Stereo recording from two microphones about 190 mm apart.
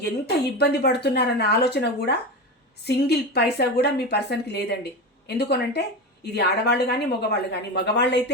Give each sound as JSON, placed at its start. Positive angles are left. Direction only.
{"t": 0.6, "sound": "a woman's voice", "side_deg": 60}